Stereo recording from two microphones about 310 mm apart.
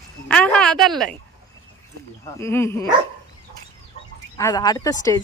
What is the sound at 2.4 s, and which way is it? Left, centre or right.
Speech, centre.